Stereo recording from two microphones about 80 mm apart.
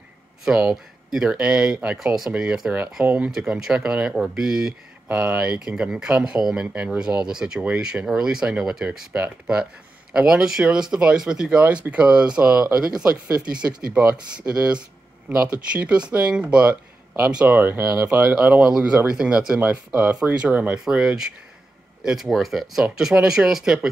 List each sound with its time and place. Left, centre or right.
0.5 s speech: centre
18.4 s speech: centre